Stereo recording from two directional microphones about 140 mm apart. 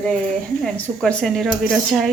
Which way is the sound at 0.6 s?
5° left (ahead or behind).